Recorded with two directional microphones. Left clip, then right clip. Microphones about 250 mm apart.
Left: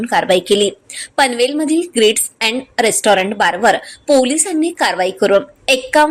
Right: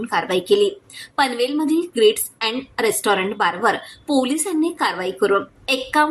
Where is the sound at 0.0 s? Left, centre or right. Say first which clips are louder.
Left 7 dB; centre.